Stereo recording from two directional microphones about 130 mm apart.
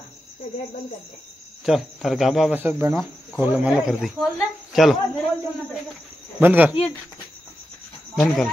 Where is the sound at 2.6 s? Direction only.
15° right (ahead or behind); by 5.0 s centre (ahead or behind).